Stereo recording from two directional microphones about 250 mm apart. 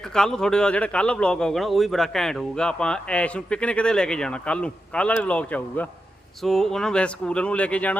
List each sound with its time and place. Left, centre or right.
0.1 s a man's voice: centre